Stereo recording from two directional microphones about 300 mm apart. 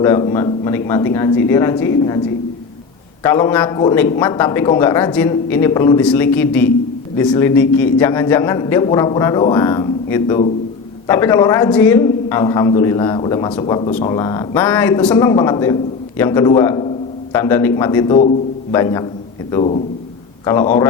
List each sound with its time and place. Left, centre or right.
0.0 s a man's voice: centre
3.2 s a man's voice: centre